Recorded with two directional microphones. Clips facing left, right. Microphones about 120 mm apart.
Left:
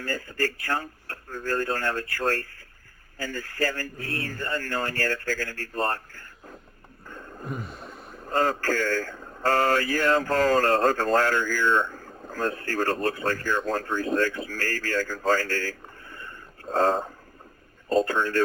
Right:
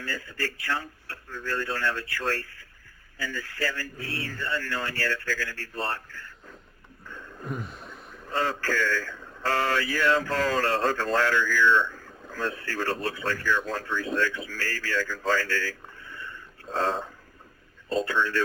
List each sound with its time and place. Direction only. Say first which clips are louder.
0.0 s speech: left 5 dB; 45° left (ahead or behind)
7.1 s a sound: left 2 dB; 40° left (ahead or behind)
7.4 s gasp: even; centre (ahead or behind)
8.1 s speech: left 4 dB; 45° left (ahead or behind)